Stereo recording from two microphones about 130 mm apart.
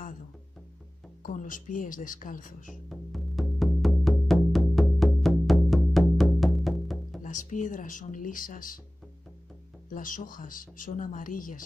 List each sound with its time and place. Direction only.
1.2 s speech: 80° left
2.9 s music: centre (ahead or behind)
7.2 s speech: 70° left (ahead or behind); by 8.7 s 90° left
9.8 s speech: 90° left